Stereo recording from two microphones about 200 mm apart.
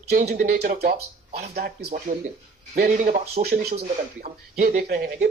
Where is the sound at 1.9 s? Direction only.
40° right (ahead or behind).